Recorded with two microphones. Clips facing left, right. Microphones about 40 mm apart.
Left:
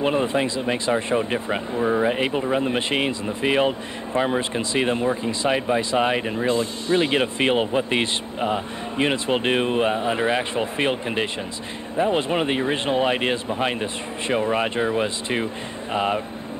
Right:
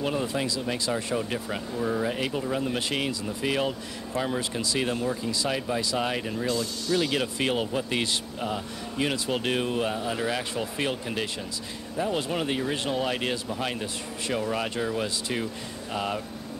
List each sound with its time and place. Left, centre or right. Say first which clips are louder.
0.0 s speech: left 7 dB; left